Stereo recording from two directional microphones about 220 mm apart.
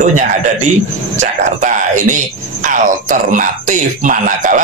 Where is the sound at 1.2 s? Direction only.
35° right (ahead or behind).